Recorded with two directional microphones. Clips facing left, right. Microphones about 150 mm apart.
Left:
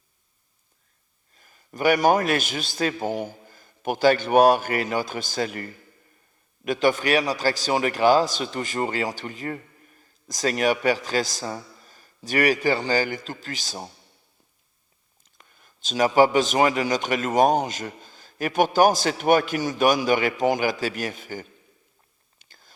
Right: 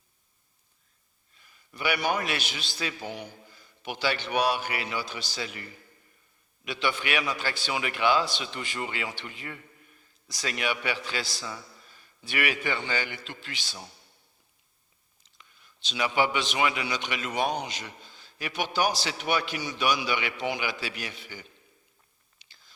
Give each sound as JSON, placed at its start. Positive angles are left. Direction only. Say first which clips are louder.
{"t": 1.3, "sound": "a man's voice", "louder": "left 8 dB", "side_deg": 45}
{"t": 15.2, "sound": "a man's voice", "louder": "left 3 dB", "side_deg": 50}
{"t": 22.4, "sound": "whispering", "louder": "left 6 dB", "side_deg": 50}